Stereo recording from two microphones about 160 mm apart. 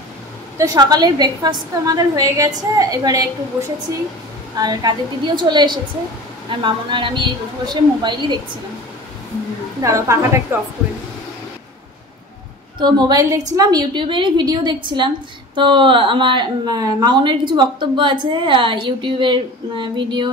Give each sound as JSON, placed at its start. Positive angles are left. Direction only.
{"t": 0.6, "sound": "a woman's voice", "side_deg": -25}
{"t": 4.6, "sound": "a woman's voice", "side_deg": -25}
{"t": 9.8, "sound": "a woman's voice", "side_deg": -20}
{"t": 12.7, "sound": "a woman's voice", "side_deg": -30}